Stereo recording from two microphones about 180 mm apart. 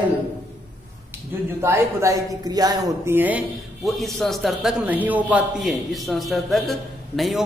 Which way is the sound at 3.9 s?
Centre (ahead or behind).